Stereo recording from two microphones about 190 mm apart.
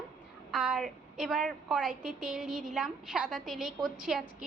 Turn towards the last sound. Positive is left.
turn(degrees=0)  # may be behind; listen again after turning